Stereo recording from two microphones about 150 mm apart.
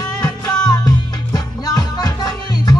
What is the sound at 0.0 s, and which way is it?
Music, 25° left (ahead or behind).